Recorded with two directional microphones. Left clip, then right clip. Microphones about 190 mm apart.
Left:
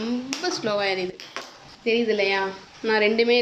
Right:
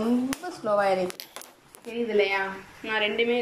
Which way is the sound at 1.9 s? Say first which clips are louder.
Left 3 dB; 15° left (ahead or behind).